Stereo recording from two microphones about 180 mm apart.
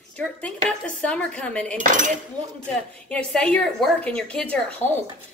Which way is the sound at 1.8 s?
45° right (ahead or behind).